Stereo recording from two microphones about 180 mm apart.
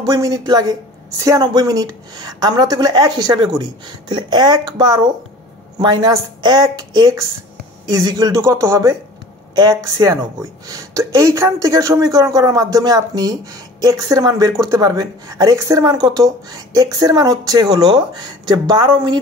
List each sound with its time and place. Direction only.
0.0 s a woman's voice: 20° right (ahead or behind)